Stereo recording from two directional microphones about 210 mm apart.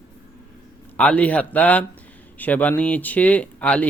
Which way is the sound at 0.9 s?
5° left (ahead or behind).